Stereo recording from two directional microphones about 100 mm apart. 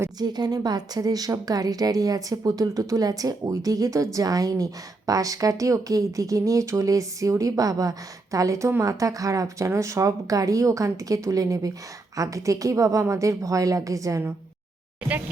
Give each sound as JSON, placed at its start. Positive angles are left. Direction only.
{"t": 0.2, "sound": "a woman's voice", "side_deg": -40}